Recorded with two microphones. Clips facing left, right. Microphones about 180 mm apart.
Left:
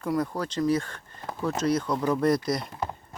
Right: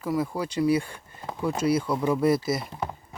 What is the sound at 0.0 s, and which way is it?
Speech, 5° right (ahead or behind).